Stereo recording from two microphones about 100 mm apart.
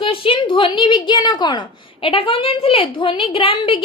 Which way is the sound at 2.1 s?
65° left (ahead or behind).